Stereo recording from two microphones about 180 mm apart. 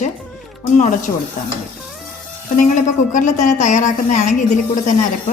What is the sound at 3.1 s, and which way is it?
A woman's voice, 45° left (ahead or behind).